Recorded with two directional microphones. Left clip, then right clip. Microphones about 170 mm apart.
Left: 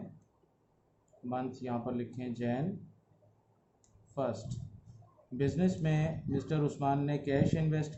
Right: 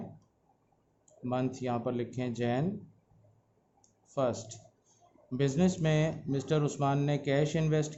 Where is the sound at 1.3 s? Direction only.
50° right (ahead or behind).